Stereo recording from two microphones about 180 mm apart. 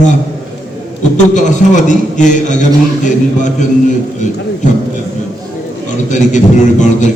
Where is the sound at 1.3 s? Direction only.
45° left (ahead or behind).